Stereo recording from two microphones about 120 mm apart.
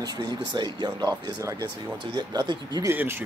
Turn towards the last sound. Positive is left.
turn(degrees=-20)  # may be behind; listen again after turning